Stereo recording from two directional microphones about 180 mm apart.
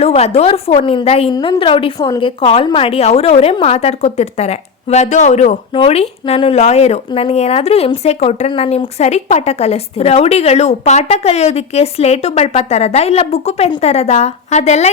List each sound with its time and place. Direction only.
0.0 s a woman's voice: 35° left (ahead or behind)